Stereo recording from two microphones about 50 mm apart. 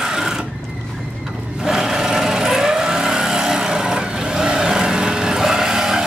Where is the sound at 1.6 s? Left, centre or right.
Centre.